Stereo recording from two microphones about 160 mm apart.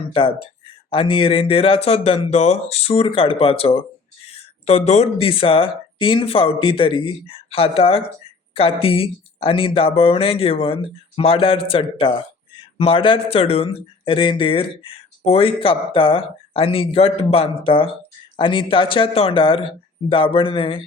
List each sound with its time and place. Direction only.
0.1 s speech: 35° left (ahead or behind)